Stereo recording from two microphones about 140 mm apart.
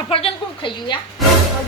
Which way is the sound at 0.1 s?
40° left (ahead or behind).